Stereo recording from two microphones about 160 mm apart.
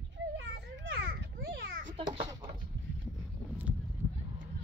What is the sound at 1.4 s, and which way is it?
Children playing, 80° right.